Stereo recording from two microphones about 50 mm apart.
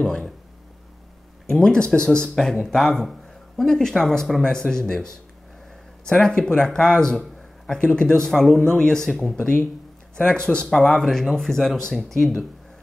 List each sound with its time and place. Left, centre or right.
0.0 s a man's voice: centre
1.5 s a man's voice: centre
11.0 s a man's voice: centre